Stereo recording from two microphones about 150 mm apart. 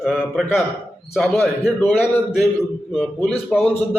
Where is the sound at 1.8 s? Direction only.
15° left (ahead or behind).